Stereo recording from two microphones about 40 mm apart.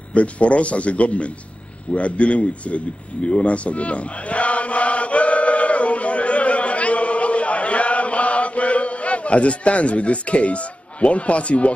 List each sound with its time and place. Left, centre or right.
0.1 s speech: left
3.3 s chant: left